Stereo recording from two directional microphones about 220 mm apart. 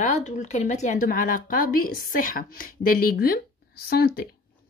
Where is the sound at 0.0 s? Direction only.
35° left (ahead or behind).